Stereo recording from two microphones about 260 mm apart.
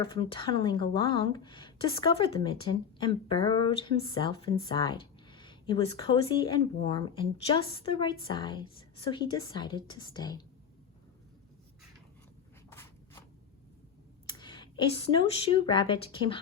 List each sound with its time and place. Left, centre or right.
0.1 s a woman's voice: centre
12.7 s writing: centre
14.3 s a sound: centre
15.6 s a woman's voice: centre